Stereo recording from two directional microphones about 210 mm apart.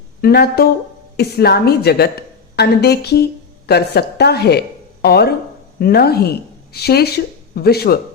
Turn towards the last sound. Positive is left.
turn(degrees=50)  # may be behind; listen again after turning